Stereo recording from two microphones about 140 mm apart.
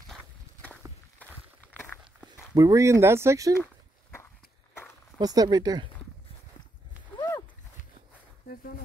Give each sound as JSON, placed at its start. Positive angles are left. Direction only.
{"t": 0.1, "sound": "walk", "side_deg": 10}
{"t": 2.5, "sound": "speech", "side_deg": -25}
{"t": 5.2, "sound": "speech", "side_deg": -25}
{"t": 7.2, "sound": "a sound", "side_deg": 20}